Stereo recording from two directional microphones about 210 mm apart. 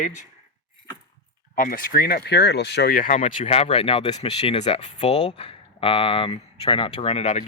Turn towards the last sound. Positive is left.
turn(degrees=30)  # may be behind; listen again after turning